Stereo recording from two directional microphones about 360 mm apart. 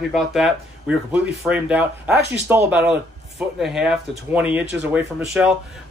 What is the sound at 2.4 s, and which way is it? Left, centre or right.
Speech, centre.